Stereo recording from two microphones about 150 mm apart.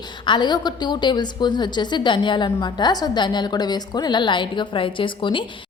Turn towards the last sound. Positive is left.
turn(degrees=35)  # may be behind; listen again after turning